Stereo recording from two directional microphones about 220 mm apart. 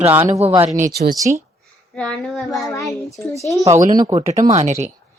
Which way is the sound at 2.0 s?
Centre (ahead or behind).